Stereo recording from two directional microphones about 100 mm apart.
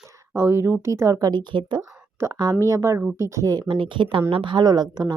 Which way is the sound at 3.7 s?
60° right (ahead or behind).